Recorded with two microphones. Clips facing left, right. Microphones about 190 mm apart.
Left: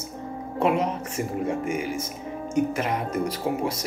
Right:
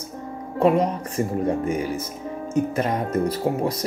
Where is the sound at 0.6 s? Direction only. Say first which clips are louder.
Right 4 dB; 35° right (ahead or behind).